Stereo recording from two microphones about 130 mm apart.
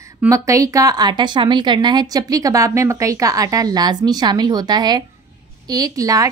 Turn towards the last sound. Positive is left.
turn(degrees=-25)  # may be behind; listen again after turning